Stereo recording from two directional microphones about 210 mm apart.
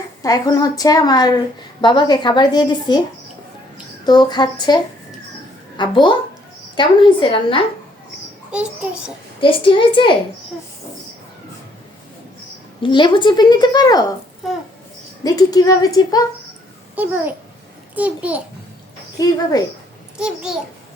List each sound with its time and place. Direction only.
0.2 s a woman's voice: 15° left (ahead or behind)
4.0 s a woman's voice: 20° left (ahead or behind)
8.5 s a child's voice: 5° right (ahead or behind)
9.4 s a woman's voice: 25° left (ahead or behind)
12.8 s a woman's voice: 20° left (ahead or behind)
15.2 s a woman's voice: 15° left (ahead or behind)
16.9 s a child's voice: 10° right (ahead or behind)
19.2 s a woman's voice: 15° left (ahead or behind)
20.1 s a child's voice: 5° right (ahead or behind)